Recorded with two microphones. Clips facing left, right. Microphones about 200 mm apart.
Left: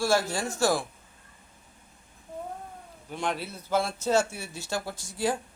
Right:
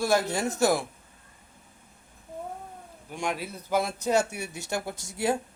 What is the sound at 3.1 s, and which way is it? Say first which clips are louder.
A man's voice: even; 10° right (ahead or behind).